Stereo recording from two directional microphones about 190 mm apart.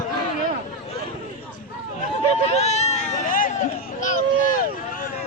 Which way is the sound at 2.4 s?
35° left (ahead or behind).